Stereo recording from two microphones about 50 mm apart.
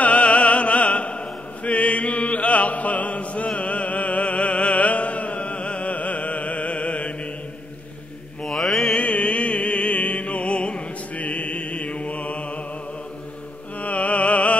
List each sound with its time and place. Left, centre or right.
0.0 s opera: left
8.5 s mantra: centre
8.9 s music: left
13.7 s music: left